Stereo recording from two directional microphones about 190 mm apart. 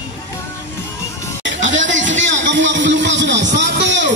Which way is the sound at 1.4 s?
75° right (ahead or behind).